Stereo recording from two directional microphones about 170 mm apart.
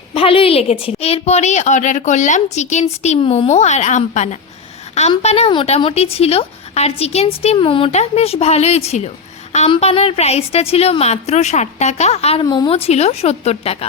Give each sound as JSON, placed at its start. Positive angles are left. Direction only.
{"t": 0.1, "sound": "a woman's voice", "side_deg": 30}